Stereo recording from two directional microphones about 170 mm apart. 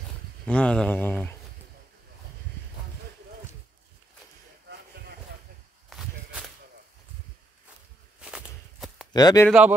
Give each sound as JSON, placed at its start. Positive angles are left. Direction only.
{"t": 0.5, "sound": "a sound", "side_deg": 5}
{"t": 5.9, "sound": "walk", "side_deg": 0}
{"t": 8.2, "sound": "walk", "side_deg": -5}
{"t": 9.1, "sound": "speech", "side_deg": 20}
{"t": 9.5, "sound": "speech", "side_deg": -5}